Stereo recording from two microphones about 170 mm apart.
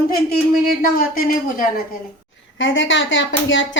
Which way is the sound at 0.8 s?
55° left (ahead or behind).